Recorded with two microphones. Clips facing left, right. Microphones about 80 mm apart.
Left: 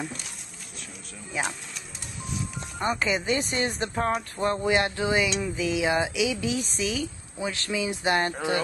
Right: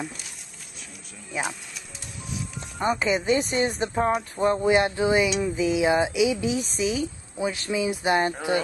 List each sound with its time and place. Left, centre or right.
0.0 s speech: centre
1.3 s speech: centre
4.6 s speech: right
5.3 s speech: centre
5.8 s speech: right
6.4 s speech: centre
7.3 s speech: centre